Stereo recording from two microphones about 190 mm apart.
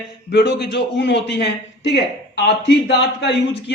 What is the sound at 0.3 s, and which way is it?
A man's voice, 60° left (ahead or behind).